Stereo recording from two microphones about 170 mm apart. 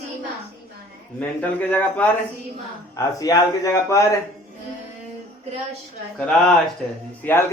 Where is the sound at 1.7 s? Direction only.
10° left (ahead or behind).